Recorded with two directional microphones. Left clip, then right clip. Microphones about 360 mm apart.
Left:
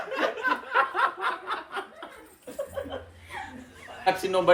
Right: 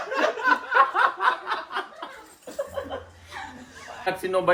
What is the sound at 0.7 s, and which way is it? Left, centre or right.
Snicker, right.